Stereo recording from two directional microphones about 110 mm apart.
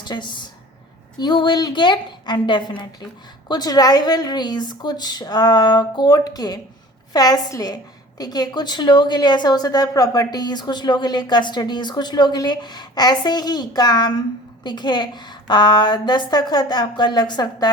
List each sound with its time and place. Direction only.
0.0 s a woman's voice: 45° left (ahead or behind)